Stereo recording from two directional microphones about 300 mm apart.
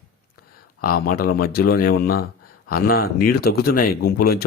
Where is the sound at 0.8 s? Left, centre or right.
Left.